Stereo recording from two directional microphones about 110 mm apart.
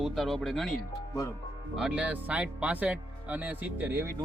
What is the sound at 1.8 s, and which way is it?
Speech, 10° right (ahead or behind).